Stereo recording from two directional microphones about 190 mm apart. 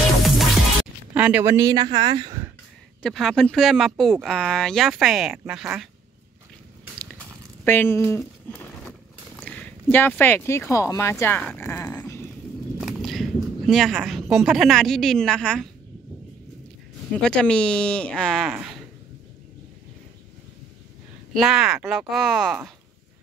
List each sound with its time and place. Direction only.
1.1 s speech: 10° right (ahead or behind)
3.0 s speech: centre (ahead or behind)
7.6 s speech: 10° left (ahead or behind)
8.2 s a sound: 5° left (ahead or behind)
9.4 s speech: 10° left (ahead or behind)
12.8 s a sound: centre (ahead or behind)
14.3 s speech: centre (ahead or behind)
17.2 s speech: 5° left (ahead or behind)
21.3 s speech: centre (ahead or behind)